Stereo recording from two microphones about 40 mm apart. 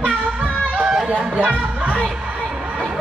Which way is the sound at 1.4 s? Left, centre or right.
Right.